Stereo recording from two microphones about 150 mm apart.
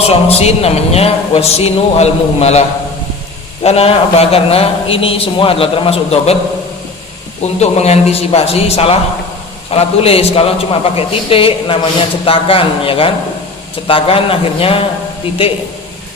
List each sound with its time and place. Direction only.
0.1 s a man's voice: 40° left (ahead or behind)
7.6 s a man's voice: 45° left (ahead or behind)